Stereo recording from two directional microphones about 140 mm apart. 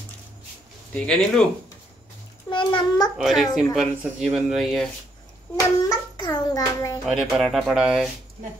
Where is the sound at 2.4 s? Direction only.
35° left (ahead or behind).